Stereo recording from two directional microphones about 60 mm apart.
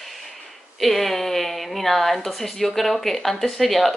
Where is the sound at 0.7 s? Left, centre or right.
Centre.